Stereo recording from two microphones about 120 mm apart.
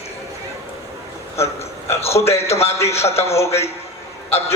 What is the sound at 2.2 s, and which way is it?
A man's voice, 60° left (ahead or behind).